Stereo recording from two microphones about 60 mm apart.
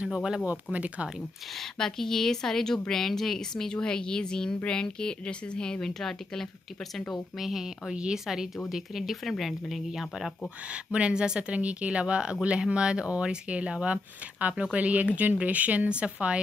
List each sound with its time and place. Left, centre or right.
0.1 s speech: centre
0.7 s speech: right
1.5 s speech: centre
7.9 s speech: centre
8.6 s speech: centre
10.7 s speech: centre